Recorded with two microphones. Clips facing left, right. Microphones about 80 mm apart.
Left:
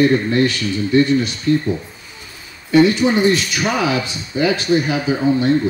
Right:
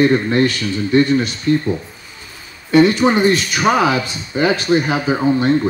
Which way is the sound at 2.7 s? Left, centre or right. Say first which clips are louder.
Right 1 dB; right.